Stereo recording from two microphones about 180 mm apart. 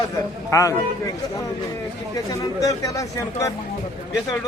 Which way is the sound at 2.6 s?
20° left (ahead or behind).